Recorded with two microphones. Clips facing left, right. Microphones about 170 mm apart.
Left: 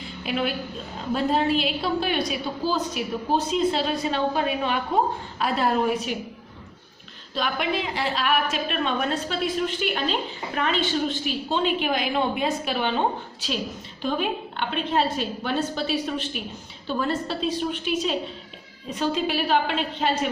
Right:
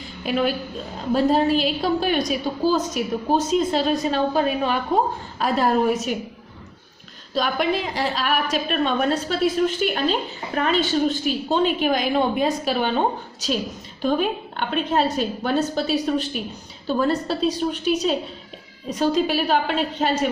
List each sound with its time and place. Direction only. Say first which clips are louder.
0.3 s a woman's voice: right 4 dB; 40° right (ahead or behind)
7.3 s a woman's voice: right 4 dB; 40° right (ahead or behind)
14.0 s a woman's voice: right 4 dB; 45° right (ahead or behind)